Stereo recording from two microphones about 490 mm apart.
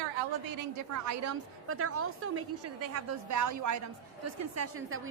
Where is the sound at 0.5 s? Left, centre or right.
Right.